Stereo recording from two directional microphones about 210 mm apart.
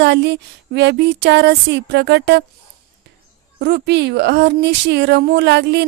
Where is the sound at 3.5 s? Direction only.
50° right (ahead or behind).